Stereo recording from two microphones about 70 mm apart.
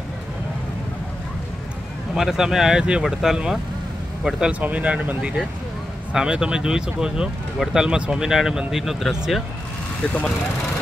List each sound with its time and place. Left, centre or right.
2.1 s speech: centre
4.5 s a man's voice: right; by 9.4 s centre
10.0 s speech: centre